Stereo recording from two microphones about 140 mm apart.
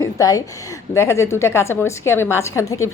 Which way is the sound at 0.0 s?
25° left (ahead or behind).